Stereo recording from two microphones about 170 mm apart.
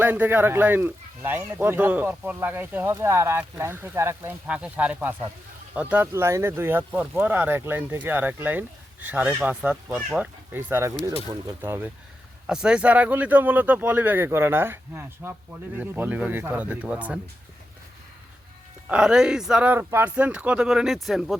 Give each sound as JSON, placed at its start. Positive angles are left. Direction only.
{"t": 0.0, "sound": "speech", "side_deg": -10}
{"t": 18.9, "sound": "speech", "side_deg": -5}